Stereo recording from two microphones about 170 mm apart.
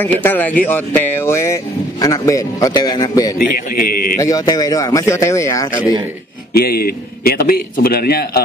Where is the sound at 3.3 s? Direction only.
55° left (ahead or behind).